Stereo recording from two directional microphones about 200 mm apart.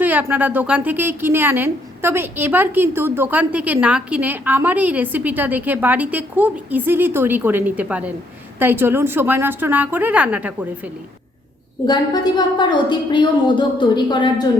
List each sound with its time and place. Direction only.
0.0 s a woman's voice: 10° right (ahead or behind)
11.9 s a woman's voice: 20° left (ahead or behind)